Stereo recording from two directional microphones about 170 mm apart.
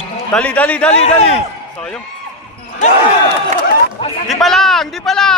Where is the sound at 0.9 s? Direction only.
40° left (ahead or behind).